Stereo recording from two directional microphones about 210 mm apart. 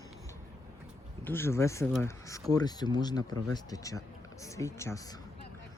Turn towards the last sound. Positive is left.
turn(degrees=15)  # may be behind; listen again after turning